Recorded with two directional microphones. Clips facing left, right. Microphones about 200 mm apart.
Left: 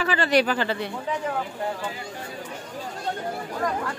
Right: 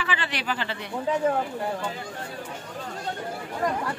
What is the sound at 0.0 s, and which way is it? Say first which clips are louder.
Speech: left 9 dB; 40° left (ahead or behind).